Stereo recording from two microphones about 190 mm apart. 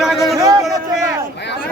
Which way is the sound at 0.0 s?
Centre (ahead or behind).